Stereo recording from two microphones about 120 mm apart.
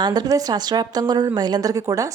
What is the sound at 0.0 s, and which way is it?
A woman's voice, 35° right (ahead or behind).